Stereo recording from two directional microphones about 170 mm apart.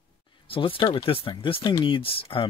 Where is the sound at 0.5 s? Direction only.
30° left (ahead or behind).